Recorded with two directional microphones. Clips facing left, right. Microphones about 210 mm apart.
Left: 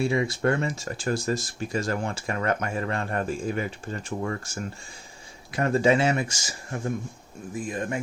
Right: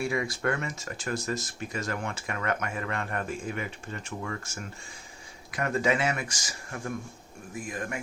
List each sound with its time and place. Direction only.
0.0 s speech: 25° left (ahead or behind)